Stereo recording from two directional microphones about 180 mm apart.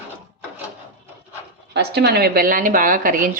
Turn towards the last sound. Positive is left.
turn(degrees=-50)  # may be behind; listen again after turning